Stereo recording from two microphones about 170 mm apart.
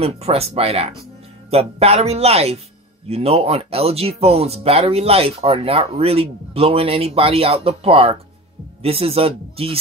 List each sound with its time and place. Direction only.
0.0 s speech: 35° right (ahead or behind)